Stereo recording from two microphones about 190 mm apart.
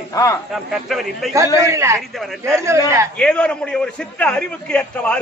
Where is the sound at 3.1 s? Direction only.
5° left (ahead or behind).